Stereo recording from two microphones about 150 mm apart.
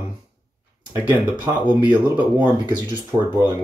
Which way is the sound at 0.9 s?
15° right (ahead or behind).